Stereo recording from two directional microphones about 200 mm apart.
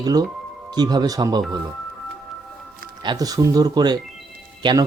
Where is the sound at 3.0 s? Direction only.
20° right (ahead or behind).